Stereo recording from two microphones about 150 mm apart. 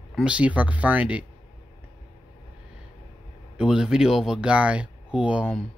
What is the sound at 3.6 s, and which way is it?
Speech, 5° right (ahead or behind).